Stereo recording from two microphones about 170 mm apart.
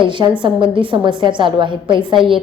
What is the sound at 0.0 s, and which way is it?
A woman's voice, 30° right (ahead or behind).